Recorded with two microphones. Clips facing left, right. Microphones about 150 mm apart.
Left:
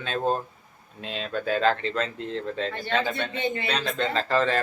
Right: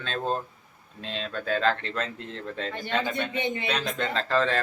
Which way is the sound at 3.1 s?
15° right (ahead or behind).